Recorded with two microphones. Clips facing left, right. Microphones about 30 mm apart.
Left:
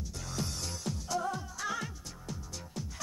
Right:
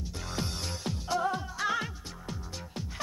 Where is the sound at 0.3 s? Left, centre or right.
Right.